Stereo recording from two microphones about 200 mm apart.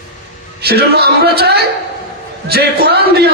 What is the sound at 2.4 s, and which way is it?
Speech, 55° right (ahead or behind).